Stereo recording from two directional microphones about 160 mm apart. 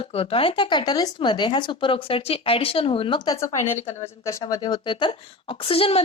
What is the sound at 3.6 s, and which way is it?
Speech, 35° left (ahead or behind).